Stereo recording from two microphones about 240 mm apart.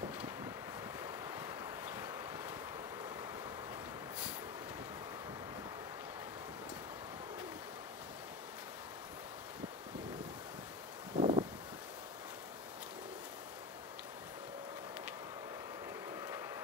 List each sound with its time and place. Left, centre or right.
1.0 s vehicle: centre
11.1 s a sound: right
16.3 s vehicle: centre